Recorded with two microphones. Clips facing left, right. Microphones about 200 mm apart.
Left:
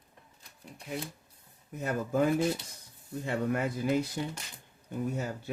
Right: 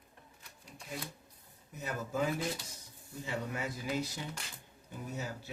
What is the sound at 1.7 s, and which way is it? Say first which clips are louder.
Speech: left 7 dB; 55° left (ahead or behind).